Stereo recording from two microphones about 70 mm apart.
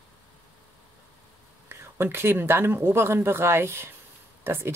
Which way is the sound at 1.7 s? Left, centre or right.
Right.